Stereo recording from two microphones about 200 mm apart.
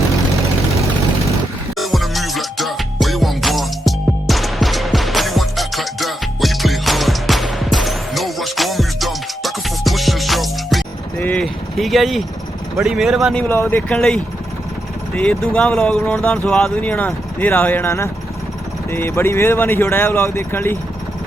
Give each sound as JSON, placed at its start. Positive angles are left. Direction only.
{"t": 1.8, "sound": "music", "side_deg": 0}
{"t": 12.7, "sound": "speech", "side_deg": 0}
{"t": 13.5, "sound": "speech", "side_deg": 10}